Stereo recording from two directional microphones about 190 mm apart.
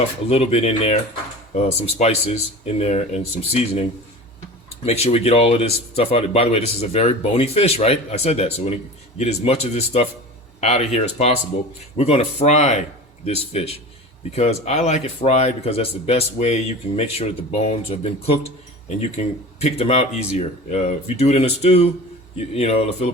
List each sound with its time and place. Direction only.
0.3 s speech: 35° left (ahead or behind)
4.9 s speech: 35° left (ahead or behind)